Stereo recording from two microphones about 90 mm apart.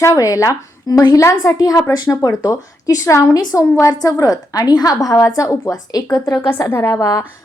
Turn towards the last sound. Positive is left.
turn(degrees=40)  # may be behind; listen again after turning